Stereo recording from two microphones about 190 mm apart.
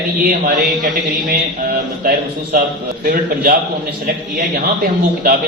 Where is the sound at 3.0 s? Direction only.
45° right (ahead or behind).